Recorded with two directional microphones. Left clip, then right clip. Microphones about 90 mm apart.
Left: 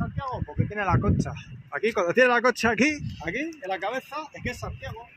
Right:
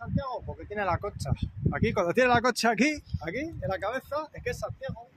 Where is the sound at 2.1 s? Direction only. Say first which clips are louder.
Left 4 dB; 50° right (ahead or behind).